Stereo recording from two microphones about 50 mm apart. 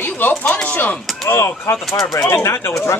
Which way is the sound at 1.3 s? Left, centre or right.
Left.